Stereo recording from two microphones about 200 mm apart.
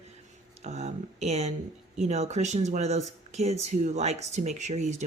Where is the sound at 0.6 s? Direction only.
35° right (ahead or behind).